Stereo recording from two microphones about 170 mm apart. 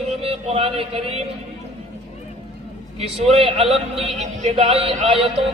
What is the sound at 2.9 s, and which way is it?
A man's voice, 35° right (ahead or behind).